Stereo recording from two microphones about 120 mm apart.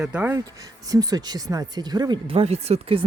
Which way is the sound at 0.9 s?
30° right (ahead or behind).